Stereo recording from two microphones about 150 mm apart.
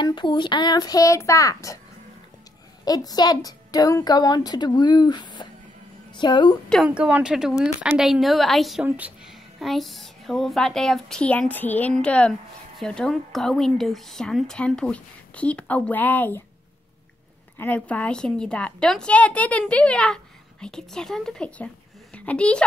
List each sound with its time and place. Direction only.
0.0 s a woman's voice: 30° left (ahead or behind)
2.8 s a woman's voice: 25° left (ahead or behind)
6.7 s a woman's voice: 5° right (ahead or behind); by 16.4 s 15° left (ahead or behind)
17.6 s a woman's voice: 10° left (ahead or behind)